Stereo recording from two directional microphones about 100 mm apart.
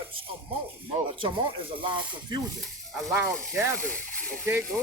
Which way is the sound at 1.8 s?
55° right (ahead or behind).